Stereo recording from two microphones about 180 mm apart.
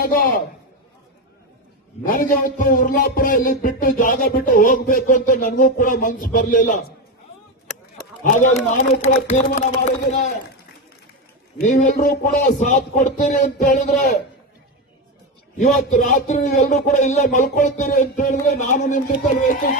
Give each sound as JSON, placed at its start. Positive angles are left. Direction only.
{"t": 2.0, "sound": "music", "side_deg": 50}
{"t": 8.2, "sound": "music", "side_deg": 45}
{"t": 11.5, "sound": "music", "side_deg": 45}
{"t": 15.5, "sound": "music", "side_deg": 45}